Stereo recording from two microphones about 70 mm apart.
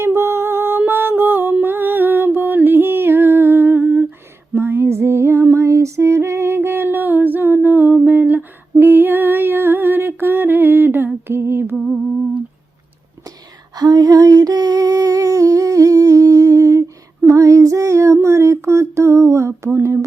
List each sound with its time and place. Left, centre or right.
0.0 s a sound: right
0.8 s music: right
8.0 s humming: right
13.7 s humming: right
17.2 s female singing: right